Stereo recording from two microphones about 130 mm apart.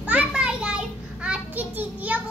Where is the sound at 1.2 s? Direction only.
10° right (ahead or behind).